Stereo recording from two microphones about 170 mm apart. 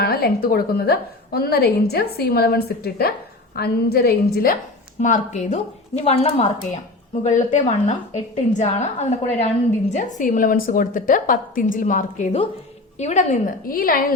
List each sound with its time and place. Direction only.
0.0 s a woman's voice: 65° left (ahead or behind)
4.9 s a woman's voice: 45° left (ahead or behind)
10.2 s a woman's voice: 50° left (ahead or behind)